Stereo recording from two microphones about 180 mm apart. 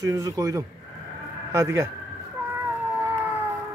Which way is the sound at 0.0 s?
20° right (ahead or behind).